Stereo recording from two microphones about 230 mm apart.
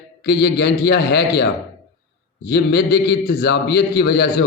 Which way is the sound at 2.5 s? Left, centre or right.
Left.